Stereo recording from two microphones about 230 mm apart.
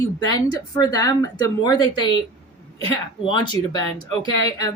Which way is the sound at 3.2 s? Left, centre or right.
Centre.